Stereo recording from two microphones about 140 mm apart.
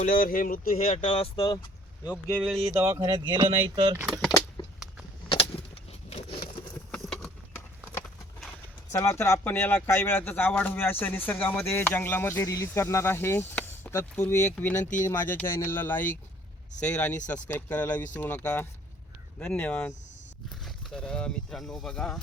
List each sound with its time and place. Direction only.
0.1 s speech: 90° left
1.0 s speech: 40° left (ahead or behind)
2.0 s speech: 15° left (ahead or behind)
2.7 s speech: 15° right (ahead or behind)
3.1 s speech: 30° right (ahead or behind)
3.9 s speech: 20° right (ahead or behind)
4.3 s keys jangling: 30° left (ahead or behind)
5.3 s keys jangling: 40° left (ahead or behind)
6.9 s a sound: 5° left (ahead or behind)
8.9 s speech: 20° left (ahead or behind)
14.8 s speech: 65° left (ahead or behind)
15.0 s speech: 15° left (ahead or behind)